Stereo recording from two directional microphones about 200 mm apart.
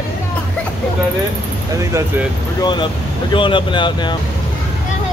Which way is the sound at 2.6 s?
20° left (ahead or behind).